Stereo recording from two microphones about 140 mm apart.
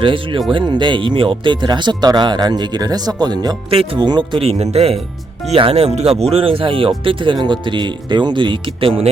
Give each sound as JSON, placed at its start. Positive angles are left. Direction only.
{"t": 0.0, "sound": "speech", "side_deg": -35}